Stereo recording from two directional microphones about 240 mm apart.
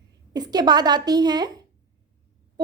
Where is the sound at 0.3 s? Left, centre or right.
Centre.